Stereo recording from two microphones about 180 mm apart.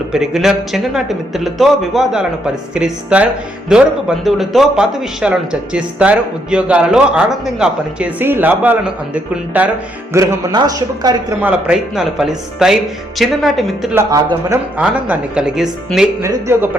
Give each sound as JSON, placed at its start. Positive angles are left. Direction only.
{"t": 0.1, "sound": "a man's voice", "side_deg": 0}
{"t": 11.4, "sound": "a man's voice", "side_deg": -5}
{"t": 13.9, "sound": "a man's voice", "side_deg": -20}
{"t": 14.8, "sound": "a man's voice", "side_deg": -5}
{"t": 16.2, "sound": "a man's voice", "side_deg": -15}